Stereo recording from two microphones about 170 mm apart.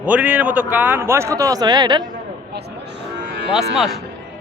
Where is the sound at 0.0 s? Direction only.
10° right (ahead or behind); by 2.0 s 25° right (ahead or behind).